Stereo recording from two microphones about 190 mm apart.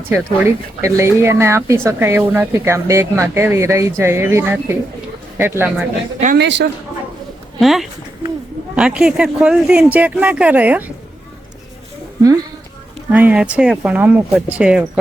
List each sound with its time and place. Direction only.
0.1 s speech: 15° right (ahead or behind)
6.3 s speech: 65° right (ahead or behind)
7.6 s speech: centre (ahead or behind)
13.1 s speech: 10° right (ahead or behind)